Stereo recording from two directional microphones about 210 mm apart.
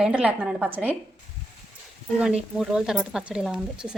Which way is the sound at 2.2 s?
5° right (ahead or behind).